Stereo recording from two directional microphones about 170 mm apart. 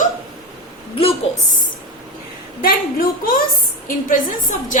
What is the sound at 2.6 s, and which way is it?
A woman's voice, 60° left (ahead or behind).